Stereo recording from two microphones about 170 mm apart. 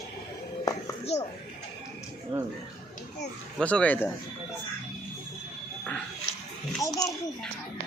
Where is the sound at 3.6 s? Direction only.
5° left (ahead or behind).